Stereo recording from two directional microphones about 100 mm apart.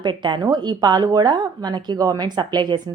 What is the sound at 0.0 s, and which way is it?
A woman's voice, 50° right (ahead or behind).